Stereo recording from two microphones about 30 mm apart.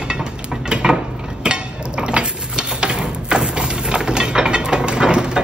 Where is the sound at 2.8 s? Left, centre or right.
Right.